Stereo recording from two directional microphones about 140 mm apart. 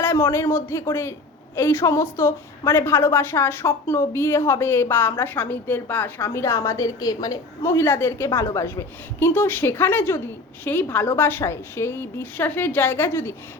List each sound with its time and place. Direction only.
0.0 s a man's voice: 15° left (ahead or behind)